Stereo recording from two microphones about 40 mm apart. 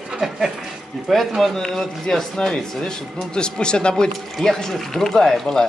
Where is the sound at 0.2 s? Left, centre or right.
Centre.